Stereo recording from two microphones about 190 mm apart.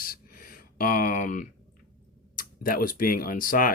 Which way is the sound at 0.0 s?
50° left (ahead or behind).